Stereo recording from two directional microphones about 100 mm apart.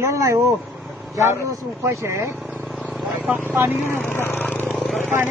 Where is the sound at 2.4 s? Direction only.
5° right (ahead or behind).